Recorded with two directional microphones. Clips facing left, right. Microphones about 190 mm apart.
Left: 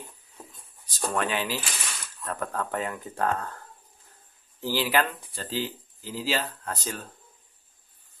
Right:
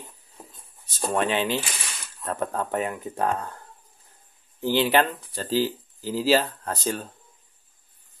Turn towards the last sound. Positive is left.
turn(degrees=-30)  # may be behind; listen again after turning